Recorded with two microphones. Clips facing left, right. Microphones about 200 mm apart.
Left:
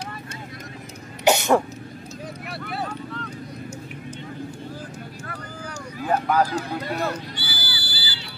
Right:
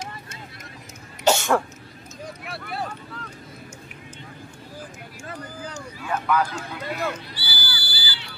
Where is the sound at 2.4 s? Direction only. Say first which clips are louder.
Left 1 dB; centre (ahead or behind).